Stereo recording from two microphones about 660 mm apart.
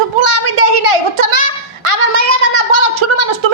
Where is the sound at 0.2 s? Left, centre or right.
Right.